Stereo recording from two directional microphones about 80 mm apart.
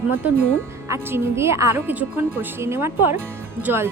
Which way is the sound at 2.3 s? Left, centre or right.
Right.